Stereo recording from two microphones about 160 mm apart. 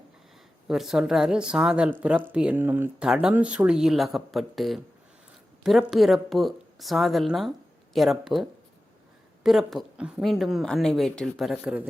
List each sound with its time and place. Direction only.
0.7 s speech: 5° right (ahead or behind)